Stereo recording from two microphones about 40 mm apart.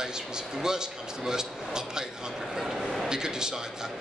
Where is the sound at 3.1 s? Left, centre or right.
Centre.